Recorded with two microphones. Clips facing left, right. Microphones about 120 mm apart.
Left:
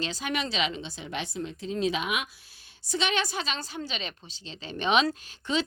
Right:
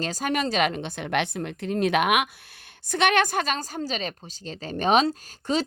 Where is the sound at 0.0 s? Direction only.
45° right (ahead or behind).